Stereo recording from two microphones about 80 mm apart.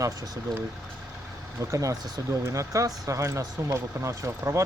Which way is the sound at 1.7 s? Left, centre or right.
Right.